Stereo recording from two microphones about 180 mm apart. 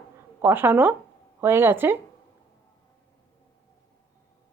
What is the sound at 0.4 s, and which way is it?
A woman's voice, 10° right (ahead or behind).